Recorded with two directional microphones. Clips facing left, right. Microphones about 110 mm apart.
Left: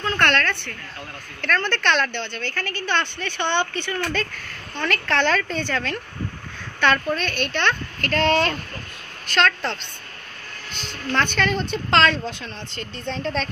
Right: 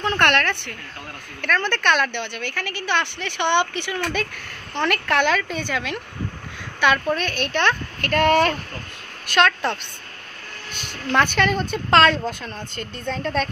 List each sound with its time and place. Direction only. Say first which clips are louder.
0.0 s a woman's voice: right 2 dB; 15° right (ahead or behind)
11.1 s a woman's voice: right 3 dB; 10° right (ahead or behind)